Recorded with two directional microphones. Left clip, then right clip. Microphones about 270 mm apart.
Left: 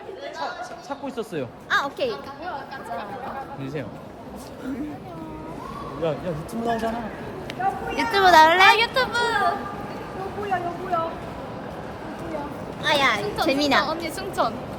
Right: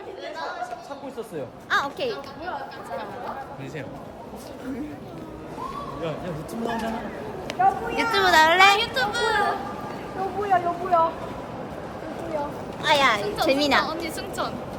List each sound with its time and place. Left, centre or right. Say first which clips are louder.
1.7 s a woman's voice: left 1 dB; centre
6.0 s speech: left 8 dB; centre
7.6 s speech: right 5 dB; right
8.1 s speech: left 4 dB; centre
8.5 s a woman's voice: left 1 dB; centre
8.8 s a child's voice: left 2 dB; left
10.5 s speech: right 4 dB; right
12.8 s a woman's voice: right 1 dB; centre